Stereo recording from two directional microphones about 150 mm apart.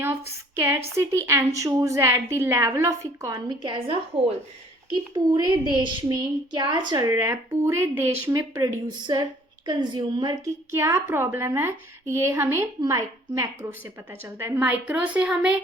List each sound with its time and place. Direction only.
0.9 s a woman's voice: 20° right (ahead or behind)
10.8 s a woman's voice: 15° right (ahead or behind)